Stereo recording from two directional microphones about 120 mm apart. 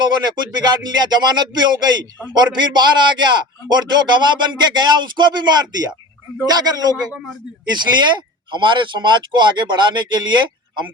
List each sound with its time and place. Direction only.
0.0 s a man's voice: 35° right (ahead or behind)